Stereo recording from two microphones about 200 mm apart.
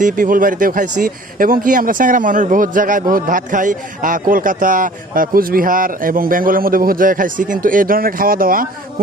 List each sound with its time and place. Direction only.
0.0 s speech: 40° right (ahead or behind)